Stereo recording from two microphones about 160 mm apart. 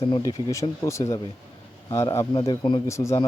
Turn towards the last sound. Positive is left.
turn(degrees=20)  # may be behind; listen again after turning